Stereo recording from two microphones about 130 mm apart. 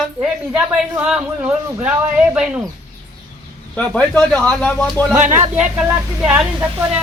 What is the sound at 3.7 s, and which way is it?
Speech, 5° left (ahead or behind).